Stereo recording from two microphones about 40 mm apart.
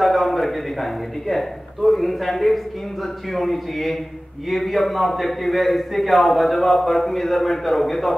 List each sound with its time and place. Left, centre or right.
0.0 s a man's voice: centre